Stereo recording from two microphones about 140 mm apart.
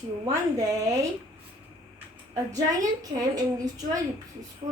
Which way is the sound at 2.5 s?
25° right (ahead or behind).